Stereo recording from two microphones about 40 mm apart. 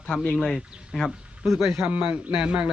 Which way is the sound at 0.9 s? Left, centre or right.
Centre.